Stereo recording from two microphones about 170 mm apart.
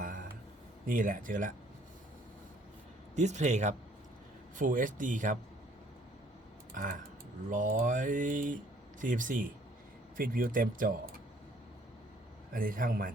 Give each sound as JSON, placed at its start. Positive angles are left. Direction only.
{"t": 0.9, "sound": "speech", "side_deg": -55}
{"t": 3.2, "sound": "speech", "side_deg": -45}
{"t": 6.7, "sound": "speech", "side_deg": -50}
{"t": 12.5, "sound": "speech", "side_deg": -55}